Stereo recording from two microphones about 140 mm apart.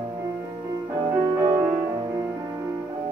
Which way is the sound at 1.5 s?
15° right (ahead or behind).